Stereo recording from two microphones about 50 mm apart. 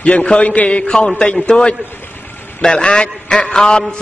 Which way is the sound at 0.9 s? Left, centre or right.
Centre.